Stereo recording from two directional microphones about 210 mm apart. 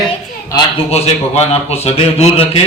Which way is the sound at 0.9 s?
30° left (ahead or behind).